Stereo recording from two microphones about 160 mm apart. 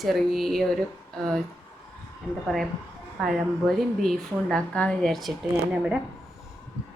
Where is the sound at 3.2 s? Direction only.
Centre (ahead or behind).